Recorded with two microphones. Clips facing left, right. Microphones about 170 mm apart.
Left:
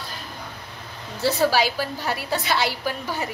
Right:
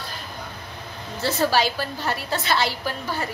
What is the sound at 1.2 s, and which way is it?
A woman's voice, 10° left (ahead or behind).